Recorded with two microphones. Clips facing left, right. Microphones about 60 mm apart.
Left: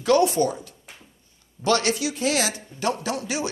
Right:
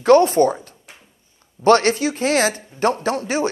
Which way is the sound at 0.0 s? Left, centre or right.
Right.